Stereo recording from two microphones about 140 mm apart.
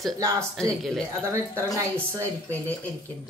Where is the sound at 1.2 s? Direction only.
20° right (ahead or behind).